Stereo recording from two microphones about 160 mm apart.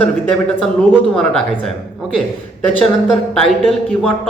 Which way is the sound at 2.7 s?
5° left (ahead or behind).